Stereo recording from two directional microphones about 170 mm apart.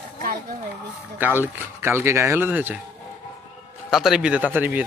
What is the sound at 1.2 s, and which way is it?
Speech, 10° right (ahead or behind).